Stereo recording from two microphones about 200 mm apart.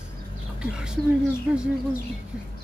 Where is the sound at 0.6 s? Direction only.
5° right (ahead or behind).